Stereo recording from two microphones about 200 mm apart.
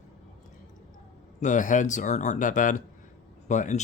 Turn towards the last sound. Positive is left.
turn(degrees=40)  # may be behind; listen again after turning